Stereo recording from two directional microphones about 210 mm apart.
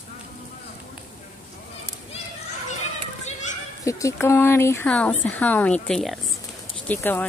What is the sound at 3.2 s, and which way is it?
Children playing, 35° left (ahead or behind).